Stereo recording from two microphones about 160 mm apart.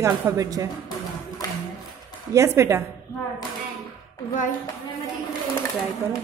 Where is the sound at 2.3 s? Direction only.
15° right (ahead or behind).